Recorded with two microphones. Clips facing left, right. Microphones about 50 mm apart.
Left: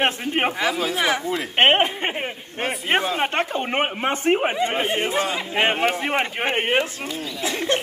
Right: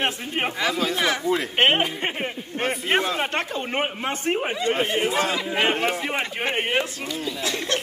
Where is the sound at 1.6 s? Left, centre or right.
Left.